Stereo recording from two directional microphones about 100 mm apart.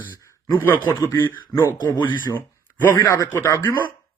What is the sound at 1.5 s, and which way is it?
Speech, 30° left (ahead or behind).